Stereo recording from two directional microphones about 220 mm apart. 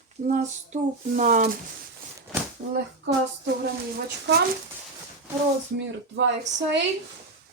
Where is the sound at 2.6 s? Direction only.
45° right (ahead or behind).